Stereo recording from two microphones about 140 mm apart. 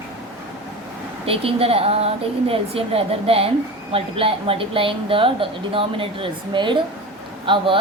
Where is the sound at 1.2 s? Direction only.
45° right (ahead or behind).